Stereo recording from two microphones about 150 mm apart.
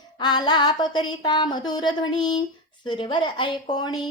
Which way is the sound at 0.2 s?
30° left (ahead or behind).